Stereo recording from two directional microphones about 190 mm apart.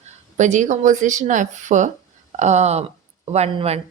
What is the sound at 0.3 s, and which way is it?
Speech, 40° right (ahead or behind).